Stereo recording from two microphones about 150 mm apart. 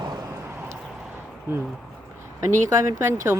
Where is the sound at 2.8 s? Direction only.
20° right (ahead or behind).